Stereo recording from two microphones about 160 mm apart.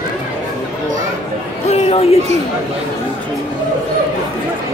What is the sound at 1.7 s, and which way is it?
Speech, 40° left (ahead or behind).